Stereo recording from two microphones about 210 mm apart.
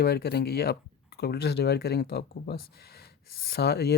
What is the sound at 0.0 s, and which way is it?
Speech, 50° left (ahead or behind).